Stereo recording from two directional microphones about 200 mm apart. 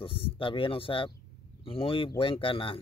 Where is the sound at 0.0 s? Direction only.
25° left (ahead or behind).